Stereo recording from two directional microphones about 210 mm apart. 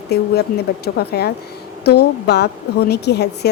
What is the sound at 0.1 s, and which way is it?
A woman's voice, 50° left (ahead or behind).